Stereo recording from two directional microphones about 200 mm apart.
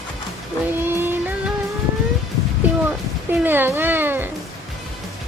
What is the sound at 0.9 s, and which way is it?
Music, 10° right (ahead or behind).